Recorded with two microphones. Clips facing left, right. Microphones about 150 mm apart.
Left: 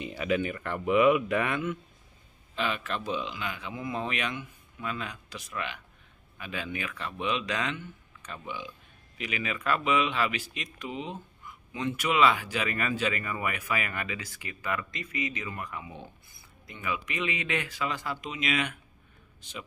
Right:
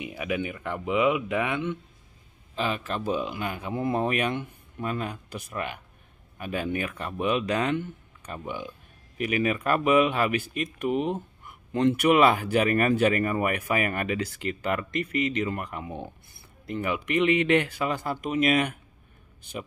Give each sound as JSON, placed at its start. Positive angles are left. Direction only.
{"t": 0.0, "sound": "speech", "side_deg": -15}
{"t": 2.5, "sound": "a man's voice", "side_deg": -35}
{"t": 3.0, "sound": "speech", "side_deg": -45}